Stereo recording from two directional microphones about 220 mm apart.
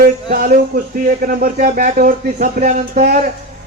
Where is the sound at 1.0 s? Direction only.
40° right (ahead or behind).